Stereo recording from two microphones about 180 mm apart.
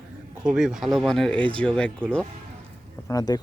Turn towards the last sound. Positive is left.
turn(degrees=20)  # may be behind; listen again after turning